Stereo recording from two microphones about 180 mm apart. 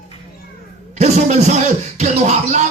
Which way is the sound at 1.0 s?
40° right (ahead or behind).